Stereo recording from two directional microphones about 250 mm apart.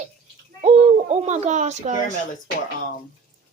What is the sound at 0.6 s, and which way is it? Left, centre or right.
A woman's voice, right.